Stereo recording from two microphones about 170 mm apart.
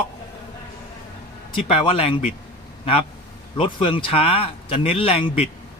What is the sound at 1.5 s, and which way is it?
Speech, 35° left (ahead or behind).